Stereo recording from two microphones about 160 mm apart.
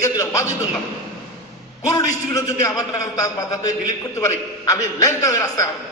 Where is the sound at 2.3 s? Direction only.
20° left (ahead or behind).